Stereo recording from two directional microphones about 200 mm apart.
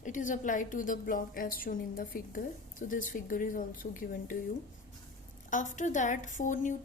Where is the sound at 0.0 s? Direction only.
40° left (ahead or behind).